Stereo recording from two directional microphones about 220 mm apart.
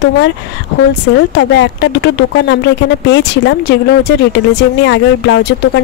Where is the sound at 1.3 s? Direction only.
50° left (ahead or behind).